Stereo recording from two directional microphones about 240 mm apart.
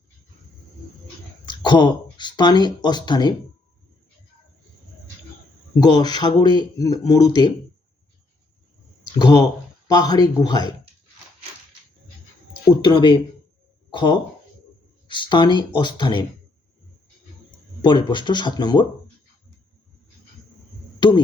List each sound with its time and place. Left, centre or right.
1.5 s speech: centre
5.8 s speech: centre
9.1 s speech: centre
12.8 s speech: centre
17.8 s speech: centre